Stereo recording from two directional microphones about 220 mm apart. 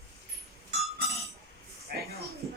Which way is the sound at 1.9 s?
45° right (ahead or behind).